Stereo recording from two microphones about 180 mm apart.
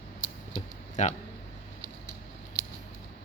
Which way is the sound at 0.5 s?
40° left (ahead or behind).